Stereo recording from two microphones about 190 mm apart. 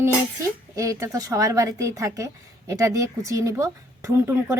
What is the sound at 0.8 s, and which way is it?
Speech, 15° right (ahead or behind).